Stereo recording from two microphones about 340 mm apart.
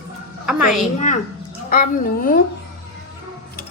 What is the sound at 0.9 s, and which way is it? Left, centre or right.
Speech, left.